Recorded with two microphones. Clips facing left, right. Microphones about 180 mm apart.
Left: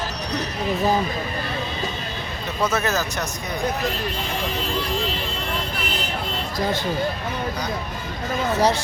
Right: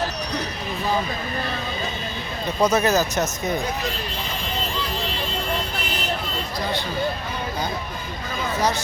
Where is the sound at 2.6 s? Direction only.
20° right (ahead or behind).